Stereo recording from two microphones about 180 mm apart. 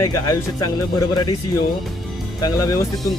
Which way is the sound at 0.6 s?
20° left (ahead or behind).